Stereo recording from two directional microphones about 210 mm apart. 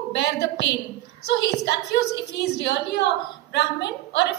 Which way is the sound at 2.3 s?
55° left (ahead or behind).